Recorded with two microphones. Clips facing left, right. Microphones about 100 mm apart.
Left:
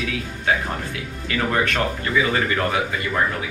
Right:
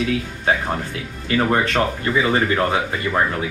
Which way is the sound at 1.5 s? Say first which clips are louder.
Even; 30° right (ahead or behind).